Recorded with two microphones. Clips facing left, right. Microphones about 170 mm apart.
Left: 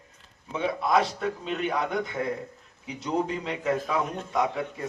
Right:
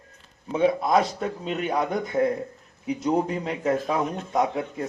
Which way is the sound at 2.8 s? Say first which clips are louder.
Right 5 dB; 45° right (ahead or behind).